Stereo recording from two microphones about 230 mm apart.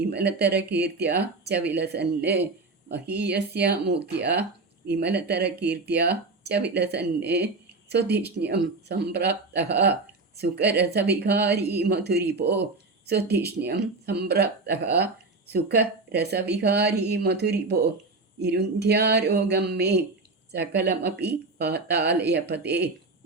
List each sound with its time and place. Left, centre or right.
0.1 s speech: right